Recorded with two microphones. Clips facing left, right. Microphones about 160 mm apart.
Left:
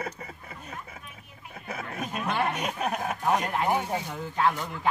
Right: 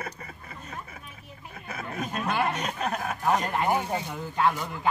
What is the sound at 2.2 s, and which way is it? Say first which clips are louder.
Chuckle: right 1 dB; 5° right (ahead or behind).